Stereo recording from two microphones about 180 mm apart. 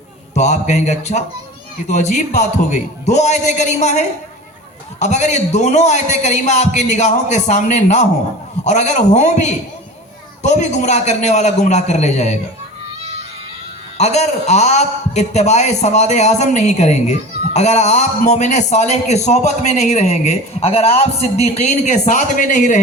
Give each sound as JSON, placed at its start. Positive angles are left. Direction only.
{"t": 0.3, "sound": "a man's voice", "side_deg": 40}
{"t": 14.0, "sound": "a man's voice", "side_deg": 40}